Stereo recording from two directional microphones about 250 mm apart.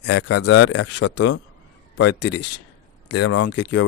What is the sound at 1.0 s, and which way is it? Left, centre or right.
Speech, left.